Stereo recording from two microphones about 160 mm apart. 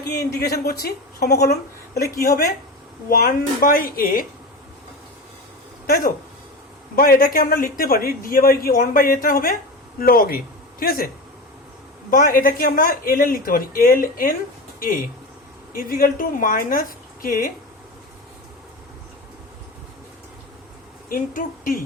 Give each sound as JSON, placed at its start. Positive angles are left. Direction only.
{"t": 0.1, "sound": "a woman's voice", "side_deg": 80}
{"t": 2.2, "sound": "a man's voice", "side_deg": 55}
{"t": 5.8, "sound": "a man's voice", "side_deg": 65}
{"t": 12.1, "sound": "a man's voice", "side_deg": 60}
{"t": 21.1, "sound": "a man's voice", "side_deg": 60}